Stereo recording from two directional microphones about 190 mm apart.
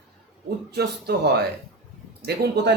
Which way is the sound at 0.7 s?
60° right (ahead or behind).